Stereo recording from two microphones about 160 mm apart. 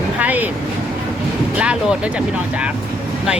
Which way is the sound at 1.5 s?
5° right (ahead or behind).